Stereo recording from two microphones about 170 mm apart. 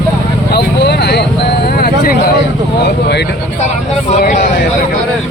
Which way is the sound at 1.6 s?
65° left (ahead or behind).